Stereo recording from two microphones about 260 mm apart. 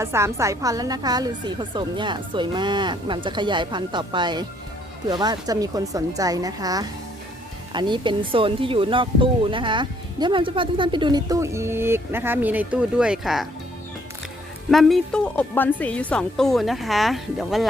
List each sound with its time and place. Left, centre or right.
0.0 s speech: centre
14.7 s a woman's voice: centre